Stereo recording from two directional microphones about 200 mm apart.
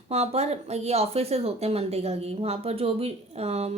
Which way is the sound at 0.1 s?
30° right (ahead or behind).